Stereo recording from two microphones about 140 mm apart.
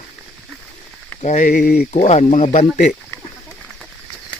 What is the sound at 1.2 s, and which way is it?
Speech, 60° left (ahead or behind).